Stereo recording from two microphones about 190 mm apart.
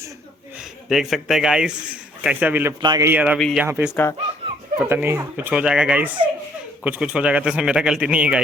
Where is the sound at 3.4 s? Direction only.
5° left (ahead or behind).